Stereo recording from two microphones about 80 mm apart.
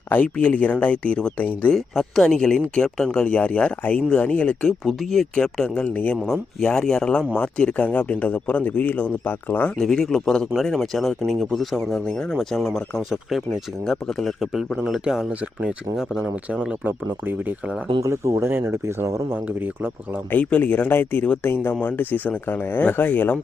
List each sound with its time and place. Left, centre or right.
0.1 s speech: centre
1.7 s speech: centre
4.9 s speech: centre
6.2 s speech: centre
9.7 s speech: centre
18.0 s speech: right
19.3 s speech: right
20.3 s speech: left